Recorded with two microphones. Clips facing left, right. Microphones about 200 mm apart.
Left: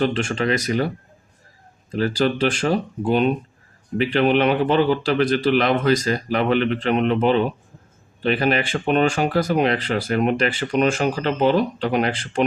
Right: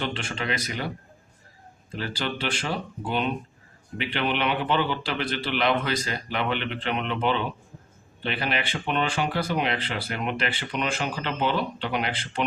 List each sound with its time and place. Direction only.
0.0 s speech: 45° left (ahead or behind)
1.9 s speech: 45° left (ahead or behind)